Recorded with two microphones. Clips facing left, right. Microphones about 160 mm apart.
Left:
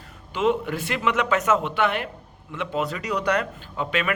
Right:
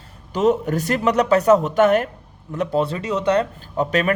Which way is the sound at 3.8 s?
40° right (ahead or behind).